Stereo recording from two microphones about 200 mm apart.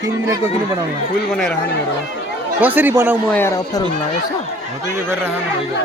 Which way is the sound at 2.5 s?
10° right (ahead or behind).